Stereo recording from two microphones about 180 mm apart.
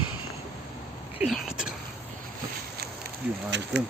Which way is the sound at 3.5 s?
75° right (ahead or behind).